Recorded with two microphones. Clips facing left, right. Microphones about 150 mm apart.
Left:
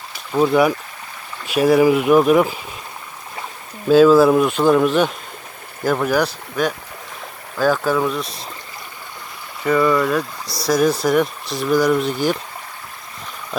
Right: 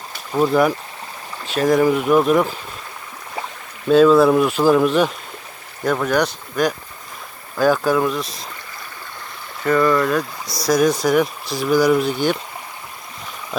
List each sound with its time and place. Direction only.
0.3 s speech: centre (ahead or behind)
3.8 s speech: centre (ahead or behind)
9.6 s speech: 5° left (ahead or behind)
10.4 s speech: 30° left (ahead or behind)
10.7 s speech: 5° left (ahead or behind)